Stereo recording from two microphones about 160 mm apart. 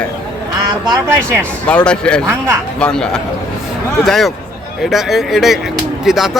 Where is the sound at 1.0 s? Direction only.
15° right (ahead or behind).